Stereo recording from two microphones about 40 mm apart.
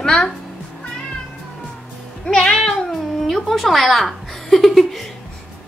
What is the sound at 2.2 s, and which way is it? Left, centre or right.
Music, left.